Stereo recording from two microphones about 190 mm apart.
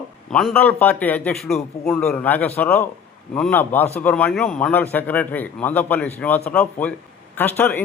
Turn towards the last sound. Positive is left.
turn(degrees=10)  # may be behind; listen again after turning